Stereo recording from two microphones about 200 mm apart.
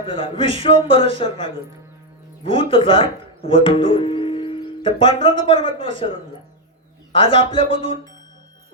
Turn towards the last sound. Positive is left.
turn(degrees=25)  # may be behind; listen again after turning